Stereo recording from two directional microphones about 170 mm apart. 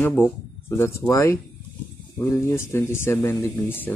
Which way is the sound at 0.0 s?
10° left (ahead or behind).